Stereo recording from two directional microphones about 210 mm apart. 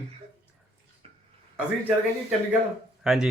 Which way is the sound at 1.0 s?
30° right (ahead or behind).